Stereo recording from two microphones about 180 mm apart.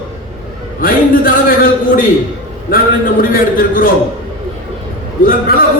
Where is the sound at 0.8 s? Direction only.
50° left (ahead or behind).